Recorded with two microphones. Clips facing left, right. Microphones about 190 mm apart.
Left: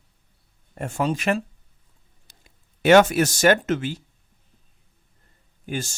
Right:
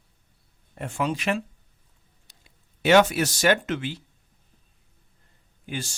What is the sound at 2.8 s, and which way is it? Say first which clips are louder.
Speech: left 3 dB; 50° left (ahead or behind).